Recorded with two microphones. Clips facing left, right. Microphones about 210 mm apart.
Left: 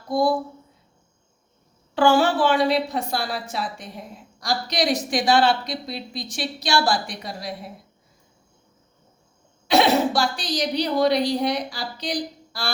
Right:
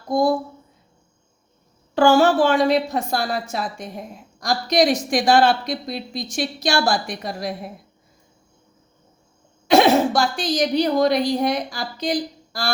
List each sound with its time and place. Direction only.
0.1 s a woman's voice: 45° right (ahead or behind)
2.0 s a woman's voice: 45° right (ahead or behind)
9.6 s a woman's voice: 45° right (ahead or behind)